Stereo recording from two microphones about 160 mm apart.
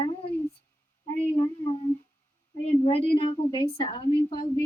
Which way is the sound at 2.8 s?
35° left (ahead or behind).